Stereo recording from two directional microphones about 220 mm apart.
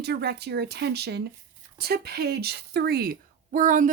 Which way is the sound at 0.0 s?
50° right (ahead or behind).